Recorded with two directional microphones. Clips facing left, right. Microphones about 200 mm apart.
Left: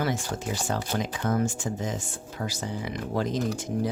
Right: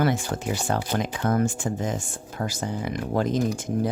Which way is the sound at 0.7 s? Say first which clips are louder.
Right 3 dB; 60° right (ahead or behind).